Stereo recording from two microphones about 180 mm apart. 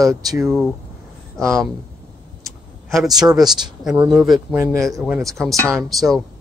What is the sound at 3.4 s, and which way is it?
Speech, 20° right (ahead or behind).